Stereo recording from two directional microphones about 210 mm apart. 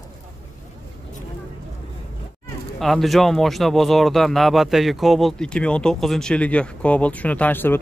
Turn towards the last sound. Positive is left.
turn(degrees=10)  # may be behind; listen again after turning